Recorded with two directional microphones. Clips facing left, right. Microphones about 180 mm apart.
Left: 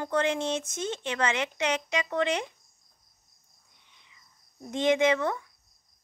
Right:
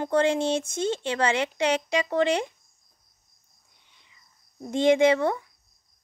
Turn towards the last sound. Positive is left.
turn(degrees=-30)  # may be behind; listen again after turning